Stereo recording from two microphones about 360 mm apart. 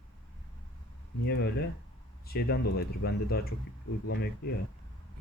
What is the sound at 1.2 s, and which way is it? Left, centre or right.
Speech, left.